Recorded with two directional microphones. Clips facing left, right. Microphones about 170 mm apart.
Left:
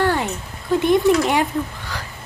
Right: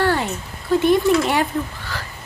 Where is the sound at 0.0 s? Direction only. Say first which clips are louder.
Even; 15° left (ahead or behind).